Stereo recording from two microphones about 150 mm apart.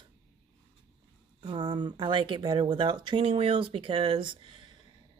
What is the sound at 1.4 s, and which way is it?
A woman's voice, 35° right (ahead or behind).